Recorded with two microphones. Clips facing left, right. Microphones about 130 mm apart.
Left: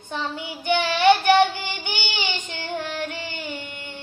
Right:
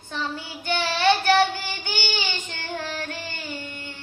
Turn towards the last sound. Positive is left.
turn(degrees=20)  # may be behind; listen again after turning